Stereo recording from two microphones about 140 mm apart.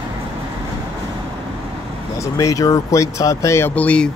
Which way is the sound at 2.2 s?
25° left (ahead or behind).